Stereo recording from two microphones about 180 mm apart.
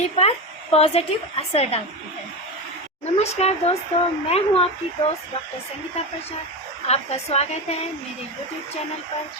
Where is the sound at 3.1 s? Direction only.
35° left (ahead or behind).